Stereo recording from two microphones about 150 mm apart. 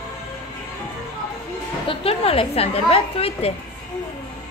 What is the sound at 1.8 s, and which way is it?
A woman's voice, 40° left (ahead or behind).